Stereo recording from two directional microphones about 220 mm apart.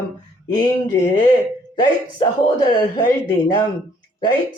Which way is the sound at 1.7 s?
20° left (ahead or behind).